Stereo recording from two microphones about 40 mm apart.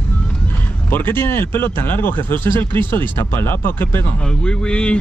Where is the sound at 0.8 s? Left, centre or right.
Left.